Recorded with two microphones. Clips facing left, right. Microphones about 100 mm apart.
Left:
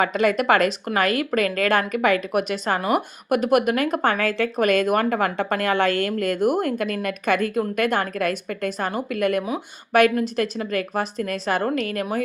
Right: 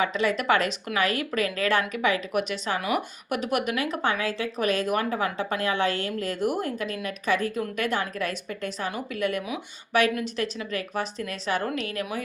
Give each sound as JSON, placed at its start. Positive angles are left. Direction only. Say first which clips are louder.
{"t": 0.0, "sound": "a woman's voice", "louder": "left 5 dB", "side_deg": 50}